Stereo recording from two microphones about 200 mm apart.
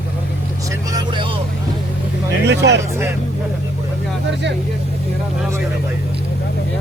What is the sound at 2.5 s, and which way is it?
Vehicle, 60° right (ahead or behind).